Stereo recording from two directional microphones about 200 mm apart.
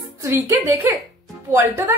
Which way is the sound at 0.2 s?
15° right (ahead or behind).